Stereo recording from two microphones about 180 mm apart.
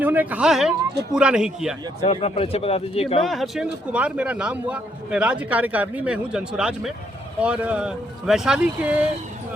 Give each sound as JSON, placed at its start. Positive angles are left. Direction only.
{"t": 0.0, "sound": "a man's voice", "side_deg": -10}
{"t": 2.0, "sound": "a man's voice", "side_deg": 35}
{"t": 3.2, "sound": "a man's voice", "side_deg": 0}